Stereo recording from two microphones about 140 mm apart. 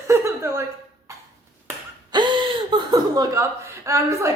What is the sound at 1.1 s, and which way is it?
Cough, 20° right (ahead or behind).